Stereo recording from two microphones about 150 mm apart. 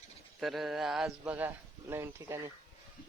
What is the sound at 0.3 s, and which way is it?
Speech, centre (ahead or behind).